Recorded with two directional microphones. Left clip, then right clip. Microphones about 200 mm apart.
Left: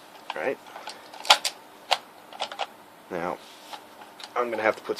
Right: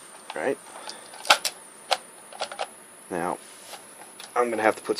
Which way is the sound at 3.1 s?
30° right (ahead or behind).